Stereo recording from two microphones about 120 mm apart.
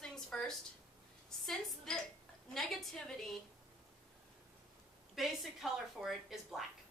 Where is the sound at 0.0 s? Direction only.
5° left (ahead or behind).